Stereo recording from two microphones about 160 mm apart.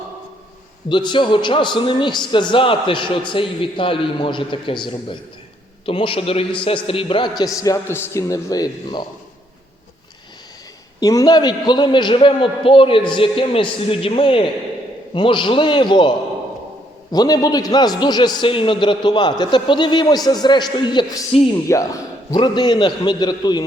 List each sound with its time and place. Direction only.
0.9 s a man's voice: 30° left (ahead or behind)
11.0 s a man's voice: 20° left (ahead or behind)
21.7 s a man's voice: 20° left (ahead or behind)